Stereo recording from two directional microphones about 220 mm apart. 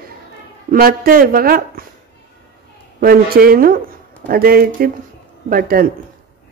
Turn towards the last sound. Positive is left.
turn(degrees=-40)  # may be behind; listen again after turning